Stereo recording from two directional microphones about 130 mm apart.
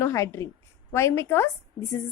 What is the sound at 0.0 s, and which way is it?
A woman's voice, 20° left (ahead or behind).